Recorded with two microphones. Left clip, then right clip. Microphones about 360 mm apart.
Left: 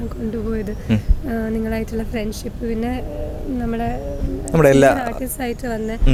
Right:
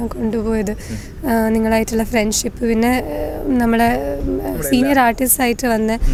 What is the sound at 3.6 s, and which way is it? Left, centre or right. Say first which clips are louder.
Speech: right 10 dB; right.